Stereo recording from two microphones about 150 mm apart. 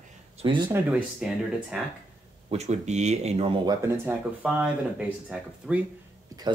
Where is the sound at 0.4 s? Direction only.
35° right (ahead or behind).